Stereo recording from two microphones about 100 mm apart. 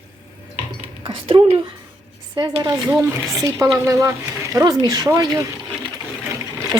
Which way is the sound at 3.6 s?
30° right (ahead or behind).